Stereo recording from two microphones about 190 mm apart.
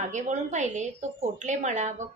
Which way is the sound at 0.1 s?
40° right (ahead or behind).